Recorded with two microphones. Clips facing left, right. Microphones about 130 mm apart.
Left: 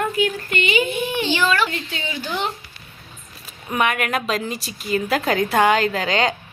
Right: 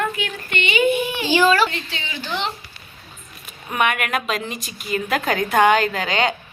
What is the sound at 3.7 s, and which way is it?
A woman's voice, 30° left (ahead or behind).